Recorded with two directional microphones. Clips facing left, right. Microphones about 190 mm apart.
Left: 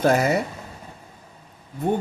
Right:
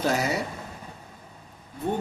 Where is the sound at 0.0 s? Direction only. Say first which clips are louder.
Left 6 dB; 55° left (ahead or behind).